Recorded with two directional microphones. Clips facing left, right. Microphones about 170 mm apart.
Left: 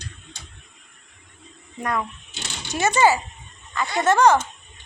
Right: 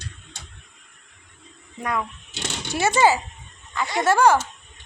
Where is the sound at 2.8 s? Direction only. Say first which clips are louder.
Even; 15° right (ahead or behind).